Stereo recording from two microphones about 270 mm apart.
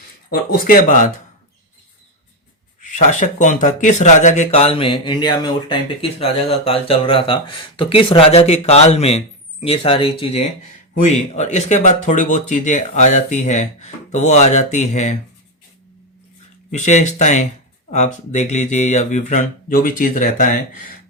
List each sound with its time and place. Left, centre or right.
0.3 s speech: left
2.8 s speech: left
16.7 s speech: left